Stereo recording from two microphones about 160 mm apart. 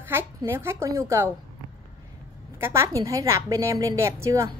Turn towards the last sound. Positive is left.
turn(degrees=-20)  # may be behind; listen again after turning